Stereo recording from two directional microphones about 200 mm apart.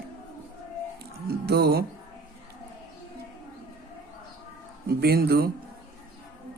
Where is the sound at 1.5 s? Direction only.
55° right (ahead or behind).